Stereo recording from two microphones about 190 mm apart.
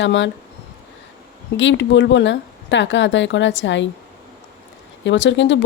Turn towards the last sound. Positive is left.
turn(degrees=70)  # may be behind; listen again after turning